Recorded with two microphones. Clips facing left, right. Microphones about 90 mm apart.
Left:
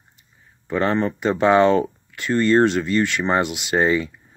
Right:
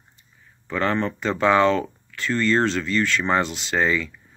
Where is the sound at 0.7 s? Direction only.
15° left (ahead or behind).